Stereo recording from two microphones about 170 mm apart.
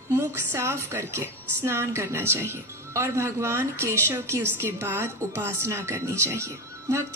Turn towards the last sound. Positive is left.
turn(degrees=-15)  # may be behind; listen again after turning